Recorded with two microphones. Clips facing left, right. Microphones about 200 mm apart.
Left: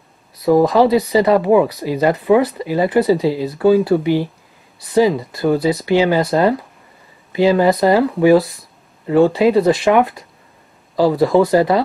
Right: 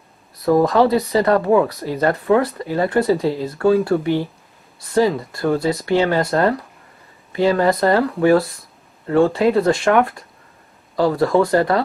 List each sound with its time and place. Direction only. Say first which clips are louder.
0.6 s speech: left 2 dB; 15° left (ahead or behind)